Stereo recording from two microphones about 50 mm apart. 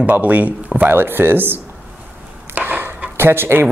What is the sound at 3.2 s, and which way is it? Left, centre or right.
Speech, right.